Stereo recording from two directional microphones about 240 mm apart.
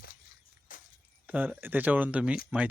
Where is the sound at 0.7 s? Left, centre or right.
Left.